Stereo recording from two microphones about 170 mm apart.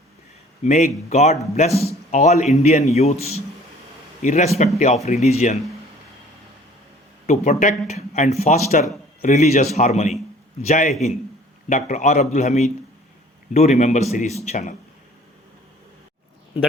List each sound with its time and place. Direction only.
0.6 s a man's voice: 45° left (ahead or behind)
7.3 s a man's voice: 50° left (ahead or behind)